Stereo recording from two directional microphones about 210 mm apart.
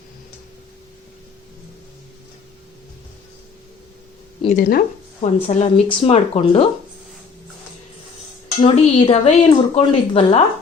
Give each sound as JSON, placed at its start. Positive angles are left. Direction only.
{"t": 4.4, "sound": "speech", "side_deg": 40}
{"t": 8.6, "sound": "speech", "side_deg": 25}